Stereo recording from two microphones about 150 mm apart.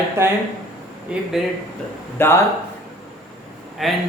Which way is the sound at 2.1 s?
15° left (ahead or behind).